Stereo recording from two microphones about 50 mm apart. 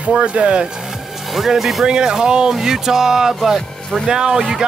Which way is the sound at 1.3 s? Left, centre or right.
Centre.